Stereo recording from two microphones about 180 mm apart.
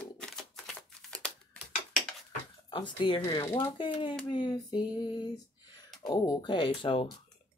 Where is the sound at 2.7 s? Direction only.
25° left (ahead or behind).